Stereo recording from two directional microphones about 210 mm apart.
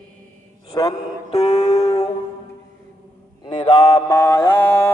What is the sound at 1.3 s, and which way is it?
Music, 30° left (ahead or behind).